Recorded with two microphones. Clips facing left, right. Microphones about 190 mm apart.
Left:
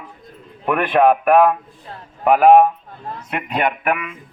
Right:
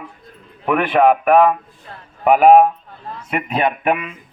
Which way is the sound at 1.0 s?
5° left (ahead or behind).